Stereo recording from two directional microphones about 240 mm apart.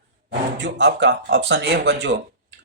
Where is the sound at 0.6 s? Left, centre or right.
Right.